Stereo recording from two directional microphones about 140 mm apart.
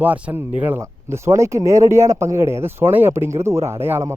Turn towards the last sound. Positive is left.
turn(degrees=-20)  # may be behind; listen again after turning